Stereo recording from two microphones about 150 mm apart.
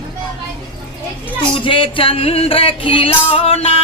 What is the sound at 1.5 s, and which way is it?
Music, 35° left (ahead or behind).